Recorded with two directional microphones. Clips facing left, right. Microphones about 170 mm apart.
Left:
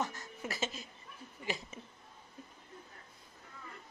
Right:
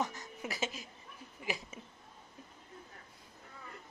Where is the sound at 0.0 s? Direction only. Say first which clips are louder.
Right 1 dB; 15° right (ahead or behind).